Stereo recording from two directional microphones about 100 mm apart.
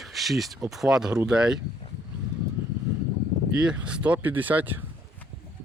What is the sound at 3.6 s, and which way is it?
Speech, 10° right (ahead or behind).